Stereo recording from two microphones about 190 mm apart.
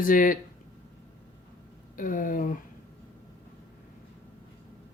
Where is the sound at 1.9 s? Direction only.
45° left (ahead or behind).